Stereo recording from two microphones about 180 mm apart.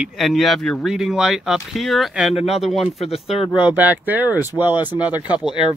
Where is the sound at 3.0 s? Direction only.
35° left (ahead or behind).